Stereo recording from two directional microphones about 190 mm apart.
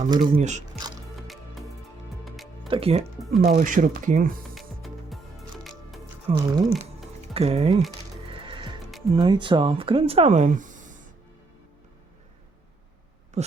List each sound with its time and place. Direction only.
0.1 s speech: 25° right (ahead or behind)
1.1 s music: centre (ahead or behind)
2.6 s speech: 30° right (ahead or behind); by 4.4 s 50° right (ahead or behind)
4.5 s music: centre (ahead or behind)
6.3 s speech: 20° right (ahead or behind)
7.3 s speech: 35° right (ahead or behind)
8.3 s music: 25° right (ahead or behind)
9.1 s speech: 25° right (ahead or behind); by 11.1 s 45° right (ahead or behind)
13.4 s a sound: 35° right (ahead or behind)